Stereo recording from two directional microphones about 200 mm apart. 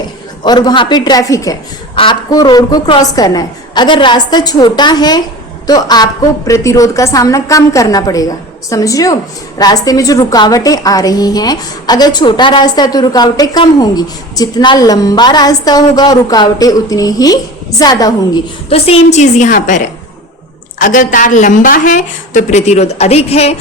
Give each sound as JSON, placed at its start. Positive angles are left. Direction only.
{"t": 0.4, "sound": "a woman's voice", "side_deg": 20}
{"t": 18.7, "sound": "a woman's voice", "side_deg": 30}